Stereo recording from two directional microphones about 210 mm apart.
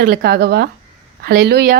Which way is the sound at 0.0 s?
50° right (ahead or behind).